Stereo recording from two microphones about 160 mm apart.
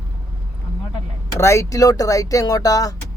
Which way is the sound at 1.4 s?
15° left (ahead or behind).